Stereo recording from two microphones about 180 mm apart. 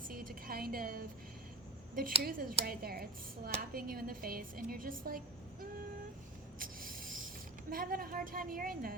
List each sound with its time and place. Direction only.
0.1 s music: 55° right (ahead or behind)
2.2 s a woman's voice: 50° right (ahead or behind)
6.6 s spray: 50° right (ahead or behind)
7.7 s a woman's voice: 55° right (ahead or behind)